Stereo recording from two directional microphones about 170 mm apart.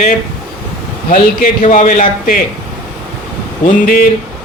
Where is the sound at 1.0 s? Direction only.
50° left (ahead or behind).